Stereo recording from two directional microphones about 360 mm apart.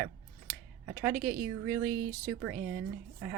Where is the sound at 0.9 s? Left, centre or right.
Centre.